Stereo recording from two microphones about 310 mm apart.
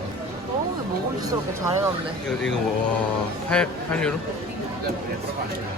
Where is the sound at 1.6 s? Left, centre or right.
Centre.